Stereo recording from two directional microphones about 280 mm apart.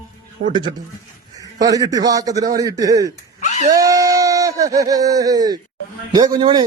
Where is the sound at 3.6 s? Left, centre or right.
Centre.